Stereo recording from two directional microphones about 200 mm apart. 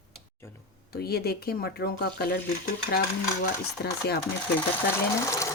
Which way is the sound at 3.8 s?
55° left (ahead or behind).